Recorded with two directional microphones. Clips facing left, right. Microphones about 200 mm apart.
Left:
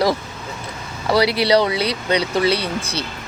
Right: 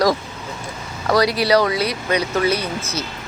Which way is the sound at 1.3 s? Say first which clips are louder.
Even; 30° left (ahead or behind).